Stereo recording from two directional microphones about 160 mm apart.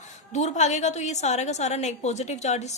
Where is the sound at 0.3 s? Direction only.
45° left (ahead or behind).